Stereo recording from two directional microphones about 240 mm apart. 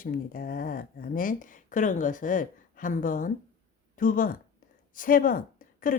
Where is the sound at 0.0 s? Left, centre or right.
Left.